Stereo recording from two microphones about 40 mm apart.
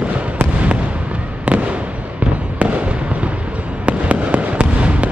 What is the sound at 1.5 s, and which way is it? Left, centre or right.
Fireworks, right.